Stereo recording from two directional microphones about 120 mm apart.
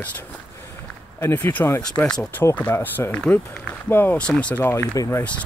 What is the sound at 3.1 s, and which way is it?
Speech, 10° left (ahead or behind).